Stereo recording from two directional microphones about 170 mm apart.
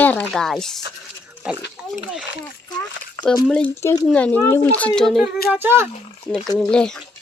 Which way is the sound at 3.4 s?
10° left (ahead or behind).